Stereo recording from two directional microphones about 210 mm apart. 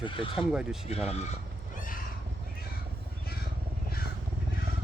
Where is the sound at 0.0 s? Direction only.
25° left (ahead or behind).